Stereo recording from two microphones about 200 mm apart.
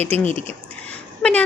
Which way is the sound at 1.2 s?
5° left (ahead or behind).